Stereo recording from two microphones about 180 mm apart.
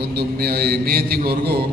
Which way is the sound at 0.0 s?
65° right (ahead or behind).